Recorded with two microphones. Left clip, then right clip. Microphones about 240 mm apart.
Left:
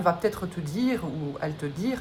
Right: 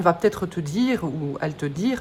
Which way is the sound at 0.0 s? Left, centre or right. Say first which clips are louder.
Right 5 dB; right.